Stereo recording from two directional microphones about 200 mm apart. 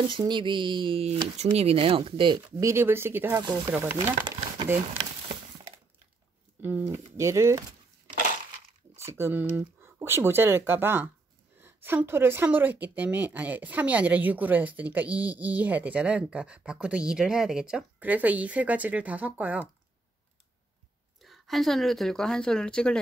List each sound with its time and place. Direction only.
0.1 s speech: 25° right (ahead or behind)
2.5 s speech: 15° right (ahead or behind)
6.6 s speech: 10° right (ahead or behind)
8.9 s speech: 15° right (ahead or behind)
21.2 s speech: centre (ahead or behind)